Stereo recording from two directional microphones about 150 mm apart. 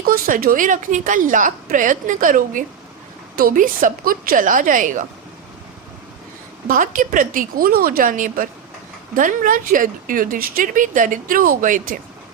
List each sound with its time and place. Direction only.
0.0 s speech: 70° right (ahead or behind)
6.7 s speech: 60° right (ahead or behind)